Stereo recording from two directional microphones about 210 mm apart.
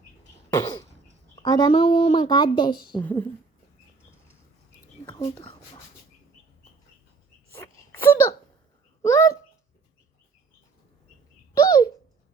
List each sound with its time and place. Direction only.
0.5 s throat clearing: 15° left (ahead or behind)
1.4 s speech: 20° left (ahead or behind)
3.0 s speech: 10° left (ahead or behind)
5.2 s speech: 25° left (ahead or behind)
7.5 s wail: 10° left (ahead or behind)
9.0 s a sound: 15° left (ahead or behind)
11.5 s a sound: 15° left (ahead or behind)